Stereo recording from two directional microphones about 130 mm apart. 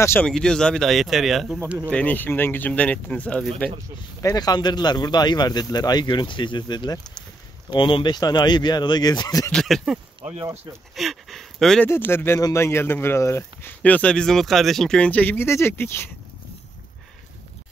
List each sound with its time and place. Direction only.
0.0 s speech: 20° left (ahead or behind)
0.3 s speech: 5° left (ahead or behind)
1.9 s speech: 10° left (ahead or behind)
4.2 s speech: 30° left (ahead or behind)
9.5 s speech: 5° left (ahead or behind)
10.4 s speech: 20° right (ahead or behind)
11.0 s speech: centre (ahead or behind)
11.9 s speech: 15° left (ahead or behind)